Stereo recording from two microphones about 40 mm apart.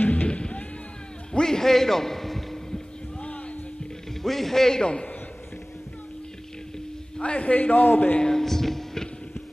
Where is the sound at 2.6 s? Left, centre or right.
Centre.